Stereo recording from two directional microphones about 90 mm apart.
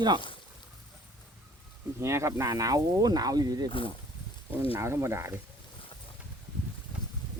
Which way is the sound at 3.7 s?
75° left (ahead or behind).